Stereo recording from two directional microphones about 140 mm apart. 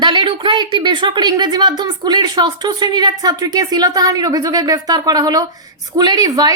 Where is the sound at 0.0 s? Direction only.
35° right (ahead or behind).